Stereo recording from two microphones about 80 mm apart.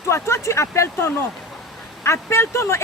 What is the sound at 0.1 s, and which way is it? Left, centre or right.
Speech, left.